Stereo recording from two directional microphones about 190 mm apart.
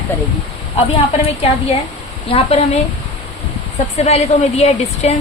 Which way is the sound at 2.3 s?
35° left (ahead or behind).